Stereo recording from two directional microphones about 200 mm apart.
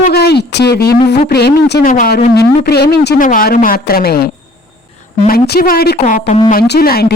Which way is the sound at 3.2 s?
45° left (ahead or behind).